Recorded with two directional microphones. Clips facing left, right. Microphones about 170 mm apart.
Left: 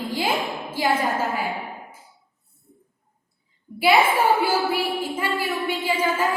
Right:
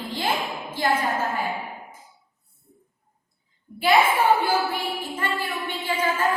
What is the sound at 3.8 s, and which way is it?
A woman's voice, 10° left (ahead or behind).